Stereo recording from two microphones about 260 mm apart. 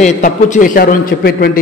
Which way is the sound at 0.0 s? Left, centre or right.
Left.